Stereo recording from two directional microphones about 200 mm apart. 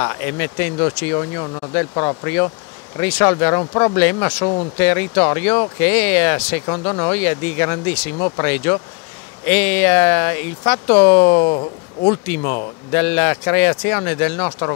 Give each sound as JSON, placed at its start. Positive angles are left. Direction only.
{"t": 0.0, "sound": "speech", "side_deg": 15}
{"t": 4.4, "sound": "speech", "side_deg": 25}
{"t": 4.7, "sound": "speech", "side_deg": 10}
{"t": 6.6, "sound": "speech", "side_deg": 20}
{"t": 11.3, "sound": "speech", "side_deg": 25}
{"t": 12.9, "sound": "speech", "side_deg": 10}